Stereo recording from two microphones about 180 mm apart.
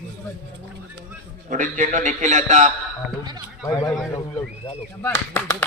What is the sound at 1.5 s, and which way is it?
A man's voice, 45° right (ahead or behind).